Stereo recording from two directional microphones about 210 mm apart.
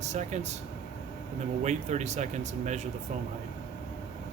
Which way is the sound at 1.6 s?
35° right (ahead or behind).